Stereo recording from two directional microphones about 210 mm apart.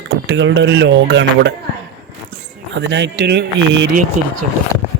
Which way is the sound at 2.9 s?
55° right (ahead or behind).